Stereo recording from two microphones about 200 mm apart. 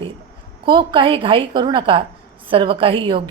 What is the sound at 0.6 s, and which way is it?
A woman's voice, 25° right (ahead or behind).